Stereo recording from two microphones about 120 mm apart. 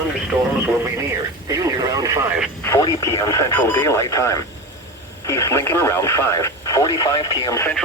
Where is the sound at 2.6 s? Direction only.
25° left (ahead or behind).